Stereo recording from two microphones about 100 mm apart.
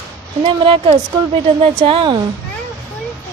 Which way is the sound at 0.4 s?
60° right (ahead or behind).